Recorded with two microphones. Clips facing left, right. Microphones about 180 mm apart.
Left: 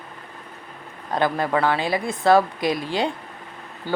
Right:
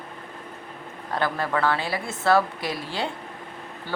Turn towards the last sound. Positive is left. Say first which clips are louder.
# left 6 dB
turn(degrees=15)  # may be behind; listen again after turning